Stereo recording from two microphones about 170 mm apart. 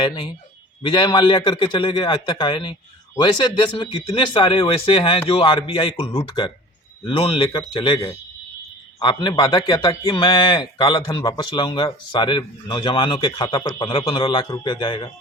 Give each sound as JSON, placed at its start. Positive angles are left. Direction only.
{"t": 0.8, "sound": "a man's voice", "side_deg": 30}
{"t": 9.0, "sound": "a man's voice", "side_deg": 25}